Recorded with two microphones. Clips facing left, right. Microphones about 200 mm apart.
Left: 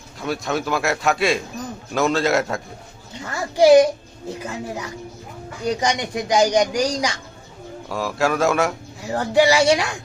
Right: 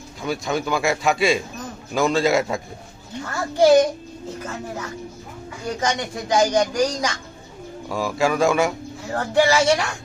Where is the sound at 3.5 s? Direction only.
15° left (ahead or behind).